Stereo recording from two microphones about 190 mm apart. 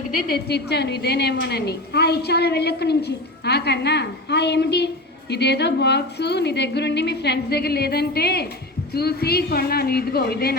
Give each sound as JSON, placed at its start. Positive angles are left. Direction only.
{"t": 0.1, "sound": "a woman's voice", "side_deg": 55}